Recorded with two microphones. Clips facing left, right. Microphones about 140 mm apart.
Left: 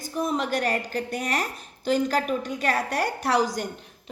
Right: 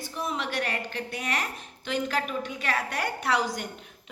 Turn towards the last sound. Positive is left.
turn(degrees=40)  # may be behind; listen again after turning